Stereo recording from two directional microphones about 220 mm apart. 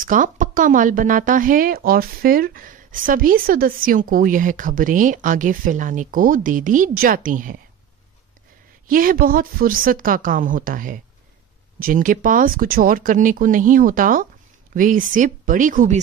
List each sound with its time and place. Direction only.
0.0 s speech: 35° right (ahead or behind)
8.8 s speech: 40° right (ahead or behind)